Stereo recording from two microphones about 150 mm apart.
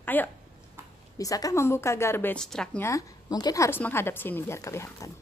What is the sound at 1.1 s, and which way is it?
A woman's voice, 25° left (ahead or behind).